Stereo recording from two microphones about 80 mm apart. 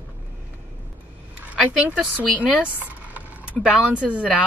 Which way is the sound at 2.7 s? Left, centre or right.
Centre.